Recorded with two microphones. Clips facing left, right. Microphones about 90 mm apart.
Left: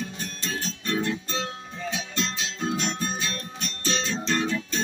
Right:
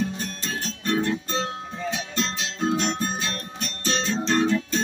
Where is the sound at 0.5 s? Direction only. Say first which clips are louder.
Right 3 dB; 45° right (ahead or behind).